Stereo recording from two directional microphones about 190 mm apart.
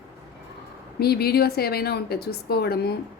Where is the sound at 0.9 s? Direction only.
55° left (ahead or behind).